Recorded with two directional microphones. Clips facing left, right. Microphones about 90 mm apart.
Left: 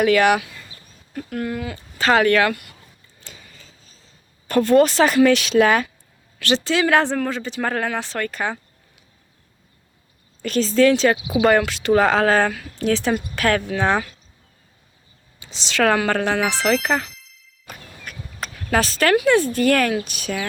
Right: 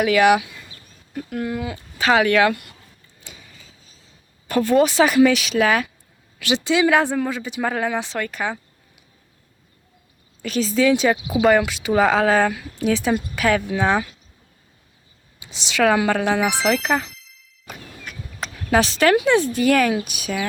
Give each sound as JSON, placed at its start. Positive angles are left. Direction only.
{"t": 0.0, "sound": "speech", "side_deg": -5}
{"t": 3.2, "sound": "a sound", "side_deg": -10}
{"t": 4.4, "sound": "speech", "side_deg": -10}
{"t": 10.4, "sound": "speech", "side_deg": -5}
{"t": 15.4, "sound": "speech", "side_deg": -10}
{"t": 17.7, "sound": "a sound", "side_deg": -20}
{"t": 19.5, "sound": "speech", "side_deg": -10}